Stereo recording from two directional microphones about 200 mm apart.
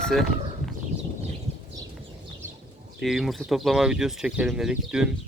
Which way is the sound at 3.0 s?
Centre (ahead or behind).